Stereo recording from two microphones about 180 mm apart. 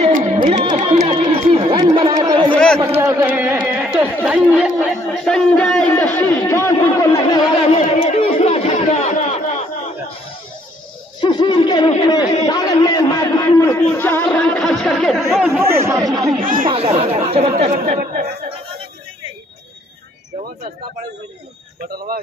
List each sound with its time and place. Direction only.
0.0 s music: 40° right (ahead or behind)
0.8 s chatter: 30° right (ahead or behind)
2.5 s a sound: 5° left (ahead or behind)
3.0 s a sound: 15° right (ahead or behind)
4.2 s speech: 5° right (ahead or behind); by 7.2 s 20° left (ahead or behind)
7.7 s chatter: 35° left (ahead or behind)
11.1 s a sound: 25° left (ahead or behind); by 15.6 s centre (ahead or behind)
15.6 s speech: 15° right (ahead or behind)
16.6 s speech: 35° right (ahead or behind); by 18.2 s 50° right (ahead or behind)
21.8 s speech: 55° right (ahead or behind)